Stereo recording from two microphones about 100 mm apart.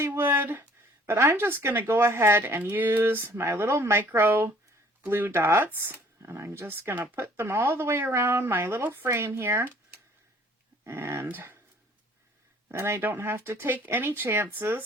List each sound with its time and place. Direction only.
0.0 s speech: 25° right (ahead or behind)
12.6 s speech: 25° right (ahead or behind)